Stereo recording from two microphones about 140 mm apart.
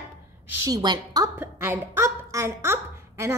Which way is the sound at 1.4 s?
15° right (ahead or behind).